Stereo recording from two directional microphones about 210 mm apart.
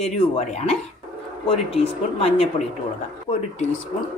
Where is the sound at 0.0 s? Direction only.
30° left (ahead or behind).